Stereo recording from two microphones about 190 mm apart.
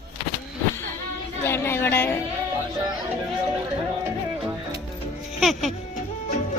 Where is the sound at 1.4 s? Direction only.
10° left (ahead or behind).